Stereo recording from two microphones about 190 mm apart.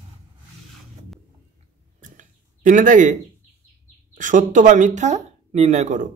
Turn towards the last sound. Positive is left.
turn(degrees=-40)  # may be behind; listen again after turning